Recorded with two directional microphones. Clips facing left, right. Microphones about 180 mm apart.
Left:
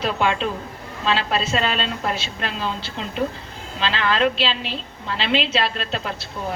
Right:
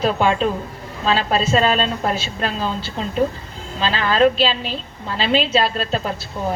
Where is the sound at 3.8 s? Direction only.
40° right (ahead or behind).